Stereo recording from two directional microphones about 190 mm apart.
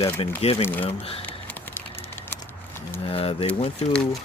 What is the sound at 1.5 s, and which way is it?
Typing, 10° left (ahead or behind).